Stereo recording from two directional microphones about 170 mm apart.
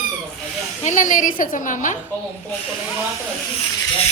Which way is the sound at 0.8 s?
50° left (ahead or behind).